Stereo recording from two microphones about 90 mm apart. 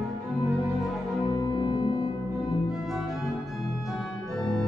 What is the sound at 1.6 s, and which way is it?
Music, 55° left (ahead or behind).